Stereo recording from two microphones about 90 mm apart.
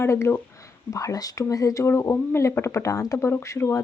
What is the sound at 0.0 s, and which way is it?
Speech, 30° left (ahead or behind).